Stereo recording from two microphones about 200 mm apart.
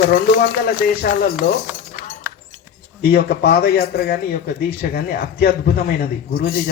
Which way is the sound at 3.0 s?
50° left (ahead or behind).